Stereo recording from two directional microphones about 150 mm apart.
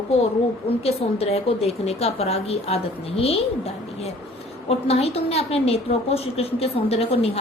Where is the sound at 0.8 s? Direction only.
40° left (ahead or behind).